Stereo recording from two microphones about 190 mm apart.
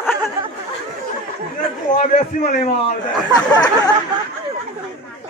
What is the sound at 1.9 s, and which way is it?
Speech, 45° left (ahead or behind).